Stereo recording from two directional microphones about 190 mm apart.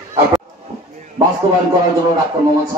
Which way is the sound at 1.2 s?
20° right (ahead or behind).